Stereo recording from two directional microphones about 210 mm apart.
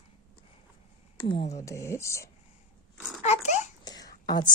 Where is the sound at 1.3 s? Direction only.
30° left (ahead or behind).